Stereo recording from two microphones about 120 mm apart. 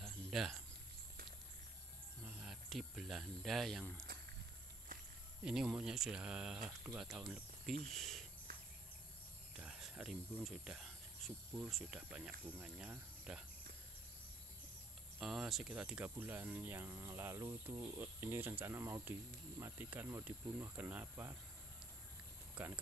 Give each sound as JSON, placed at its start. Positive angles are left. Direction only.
{"t": 0.0, "sound": "cricket", "side_deg": 0}
{"t": 2.2, "sound": "speech", "side_deg": -5}
{"t": 5.4, "sound": "speech", "side_deg": -5}
{"t": 9.6, "sound": "cricket", "side_deg": -5}
{"t": 10.4, "sound": "speech", "side_deg": -5}
{"t": 15.1, "sound": "speech", "side_deg": 0}
{"t": 22.6, "sound": "speech", "side_deg": -10}